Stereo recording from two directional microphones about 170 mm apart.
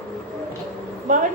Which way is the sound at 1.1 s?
50° right (ahead or behind).